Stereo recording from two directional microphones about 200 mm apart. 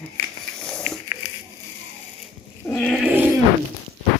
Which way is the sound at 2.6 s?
5° left (ahead or behind).